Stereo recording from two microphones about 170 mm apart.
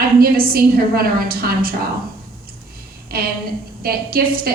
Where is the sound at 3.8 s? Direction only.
60° right (ahead or behind).